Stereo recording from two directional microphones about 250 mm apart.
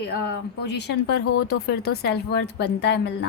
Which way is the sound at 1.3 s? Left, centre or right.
Left.